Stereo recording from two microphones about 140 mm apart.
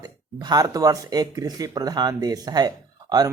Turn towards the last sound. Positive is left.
turn(degrees=-25)  # may be behind; listen again after turning